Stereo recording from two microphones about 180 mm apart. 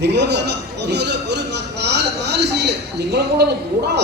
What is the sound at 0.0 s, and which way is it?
A man's voice, 70° right (ahead or behind).